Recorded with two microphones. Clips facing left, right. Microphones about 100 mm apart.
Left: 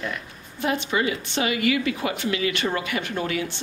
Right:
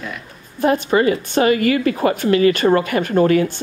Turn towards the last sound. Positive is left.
turn(degrees=-45)  # may be behind; listen again after turning